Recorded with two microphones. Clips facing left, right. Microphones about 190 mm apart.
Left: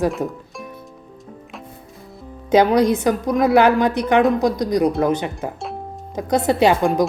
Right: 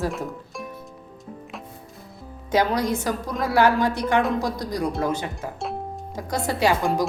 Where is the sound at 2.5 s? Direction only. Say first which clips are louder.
Left 7 dB; 20° left (ahead or behind).